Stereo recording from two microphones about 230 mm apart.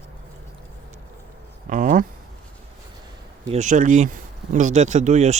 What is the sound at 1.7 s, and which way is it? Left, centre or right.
Speech, right.